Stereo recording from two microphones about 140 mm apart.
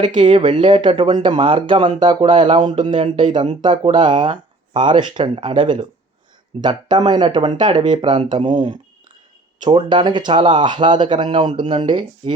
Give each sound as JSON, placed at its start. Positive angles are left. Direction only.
{"t": 0.0, "sound": "speech", "side_deg": -35}